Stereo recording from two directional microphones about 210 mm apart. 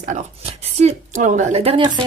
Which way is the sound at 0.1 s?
30° right (ahead or behind).